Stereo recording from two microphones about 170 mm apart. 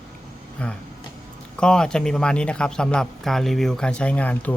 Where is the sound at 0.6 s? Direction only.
5° left (ahead or behind).